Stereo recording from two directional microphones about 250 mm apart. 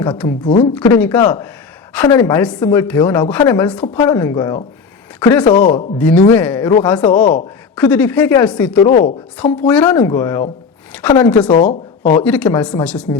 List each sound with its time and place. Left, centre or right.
0.4 s a woman's voice: left
0.7 s speech: centre
8.9 s a woman's voice: left
9.4 s a woman's voice: centre
11.5 s speech: left
12.2 s a woman's voice: centre